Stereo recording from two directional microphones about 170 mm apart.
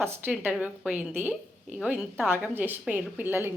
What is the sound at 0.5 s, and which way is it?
A woman's voice, 5° right (ahead or behind).